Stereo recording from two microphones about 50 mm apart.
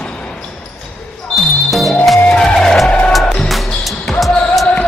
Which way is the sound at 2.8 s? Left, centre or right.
Left.